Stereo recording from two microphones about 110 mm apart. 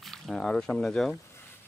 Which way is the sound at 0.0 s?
5° left (ahead or behind).